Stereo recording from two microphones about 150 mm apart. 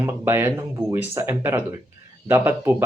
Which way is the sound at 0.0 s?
15° right (ahead or behind).